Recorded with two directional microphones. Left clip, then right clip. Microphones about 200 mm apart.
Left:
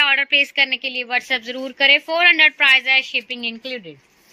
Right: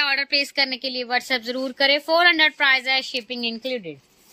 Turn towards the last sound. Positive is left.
turn(degrees=-30)  # may be behind; listen again after turning